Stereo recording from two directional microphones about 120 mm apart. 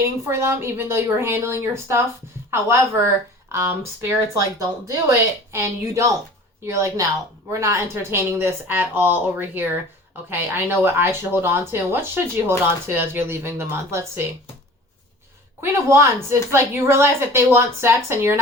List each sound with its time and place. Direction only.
0.0 s a woman's voice: 20° right (ahead or behind)
15.6 s a woman's voice: 20° right (ahead or behind)